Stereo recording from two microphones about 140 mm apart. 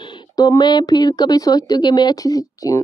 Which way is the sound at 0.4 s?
30° left (ahead or behind).